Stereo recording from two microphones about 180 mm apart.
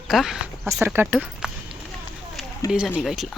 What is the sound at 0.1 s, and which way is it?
Speech, centre (ahead or behind).